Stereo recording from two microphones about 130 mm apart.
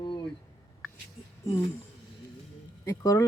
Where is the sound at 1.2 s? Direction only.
50° left (ahead or behind).